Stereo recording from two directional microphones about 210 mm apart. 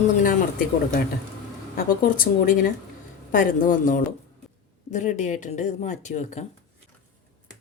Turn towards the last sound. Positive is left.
turn(degrees=35)  # may be behind; listen again after turning